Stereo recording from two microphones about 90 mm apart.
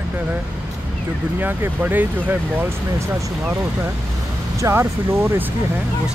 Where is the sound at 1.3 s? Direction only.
20° right (ahead or behind).